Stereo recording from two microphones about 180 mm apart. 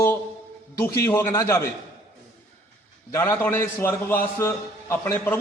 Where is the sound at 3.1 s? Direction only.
15° left (ahead or behind).